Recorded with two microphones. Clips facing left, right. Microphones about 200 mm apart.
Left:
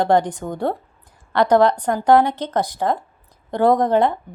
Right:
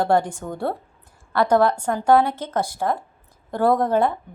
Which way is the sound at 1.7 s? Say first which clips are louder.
Left 2 dB; 15° left (ahead or behind).